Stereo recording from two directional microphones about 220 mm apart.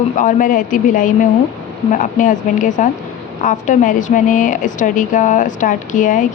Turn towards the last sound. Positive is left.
turn(degrees=35)  # may be behind; listen again after turning